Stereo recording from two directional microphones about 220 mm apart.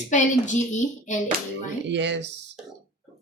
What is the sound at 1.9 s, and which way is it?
Speech, 55° right (ahead or behind).